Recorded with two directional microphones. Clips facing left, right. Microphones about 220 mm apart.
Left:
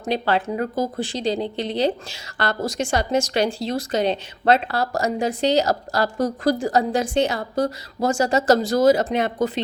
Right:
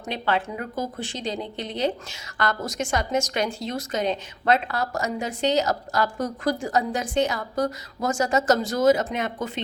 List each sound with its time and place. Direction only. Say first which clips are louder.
0.0 s speech: left 4 dB; 35° left (ahead or behind)